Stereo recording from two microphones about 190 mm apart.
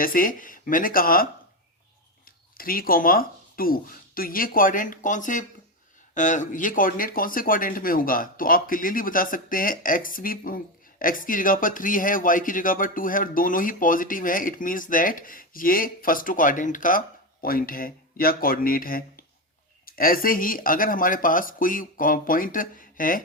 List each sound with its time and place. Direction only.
0.0 s speech: 45° left (ahead or behind)